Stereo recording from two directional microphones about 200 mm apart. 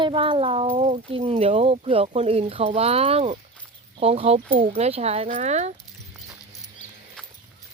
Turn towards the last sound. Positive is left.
turn(degrees=0)  # may be behind; listen again after turning